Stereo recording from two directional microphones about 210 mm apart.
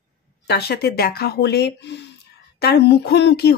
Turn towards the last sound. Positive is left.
turn(degrees=50)  # may be behind; listen again after turning